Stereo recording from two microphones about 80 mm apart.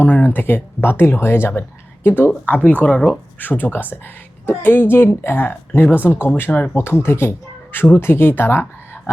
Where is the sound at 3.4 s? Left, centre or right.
Left.